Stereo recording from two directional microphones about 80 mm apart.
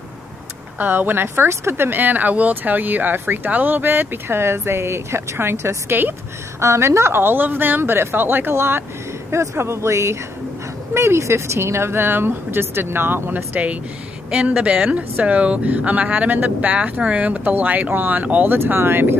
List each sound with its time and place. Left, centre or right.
0.7 s speech: right